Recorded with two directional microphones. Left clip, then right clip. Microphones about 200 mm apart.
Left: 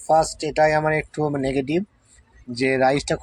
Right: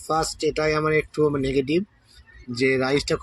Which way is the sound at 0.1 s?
10° left (ahead or behind).